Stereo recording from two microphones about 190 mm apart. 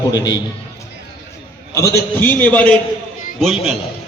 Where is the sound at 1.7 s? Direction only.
15° left (ahead or behind); by 3.8 s centre (ahead or behind).